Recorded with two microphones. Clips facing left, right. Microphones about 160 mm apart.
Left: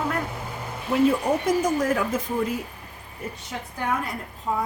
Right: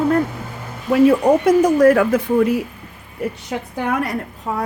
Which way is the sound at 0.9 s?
75° right (ahead or behind).